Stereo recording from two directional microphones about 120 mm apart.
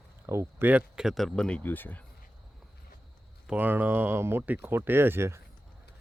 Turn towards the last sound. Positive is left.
turn(degrees=-20)  # may be behind; listen again after turning